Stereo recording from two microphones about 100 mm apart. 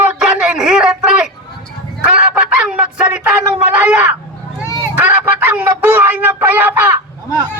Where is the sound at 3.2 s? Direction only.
10° right (ahead or behind).